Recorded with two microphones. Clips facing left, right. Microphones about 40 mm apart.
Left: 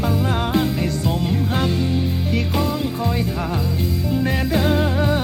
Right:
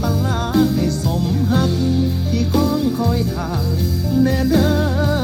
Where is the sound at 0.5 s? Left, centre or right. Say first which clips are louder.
Right 7 dB; left.